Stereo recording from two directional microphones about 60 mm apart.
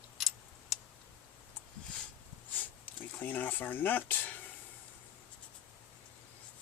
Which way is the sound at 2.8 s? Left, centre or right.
Left.